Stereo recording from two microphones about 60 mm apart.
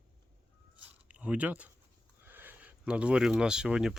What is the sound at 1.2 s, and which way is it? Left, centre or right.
Speech, right.